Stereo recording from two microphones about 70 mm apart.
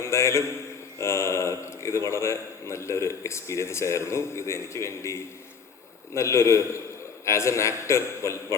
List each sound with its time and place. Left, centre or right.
0.0 s a man's voice: left
6.1 s a man's voice: left